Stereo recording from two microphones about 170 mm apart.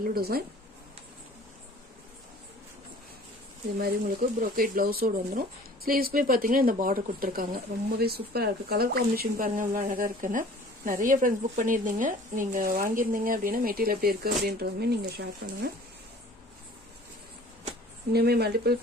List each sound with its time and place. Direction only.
0.0 s speech: 60° right (ahead or behind)
3.8 s speech: 60° right (ahead or behind)
18.1 s speech: 70° right (ahead or behind)